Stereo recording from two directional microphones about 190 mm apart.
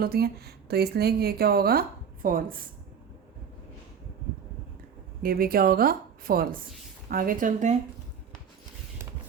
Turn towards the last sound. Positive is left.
turn(degrees=-40)  # may be behind; listen again after turning